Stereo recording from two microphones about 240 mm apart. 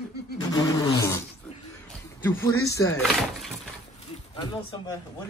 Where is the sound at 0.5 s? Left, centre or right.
Centre.